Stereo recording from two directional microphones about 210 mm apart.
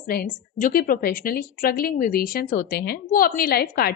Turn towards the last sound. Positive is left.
turn(degrees=45)  # may be behind; listen again after turning